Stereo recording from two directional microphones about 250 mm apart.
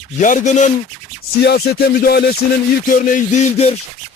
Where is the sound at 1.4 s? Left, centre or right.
Left.